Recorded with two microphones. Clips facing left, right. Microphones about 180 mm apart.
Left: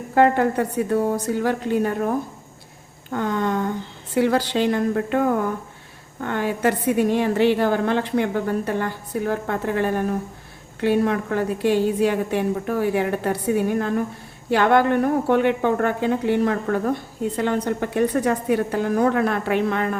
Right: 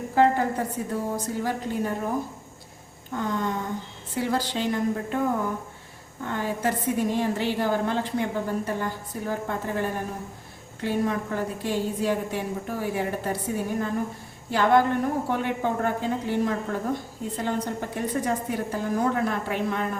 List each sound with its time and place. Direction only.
0.1 s a woman's voice: 65° left (ahead or behind)
6.2 s a woman's voice: 70° left (ahead or behind)